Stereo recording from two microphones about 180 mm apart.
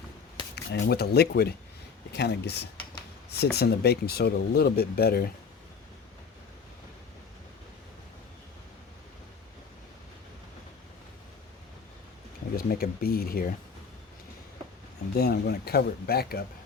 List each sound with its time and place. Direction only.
0.5 s speech: 65° left (ahead or behind)
12.5 s speech: 55° left (ahead or behind)
15.1 s speech: 60° left (ahead or behind)